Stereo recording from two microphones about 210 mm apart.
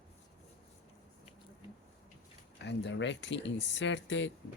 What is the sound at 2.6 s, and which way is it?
Speech, 55° left (ahead or behind).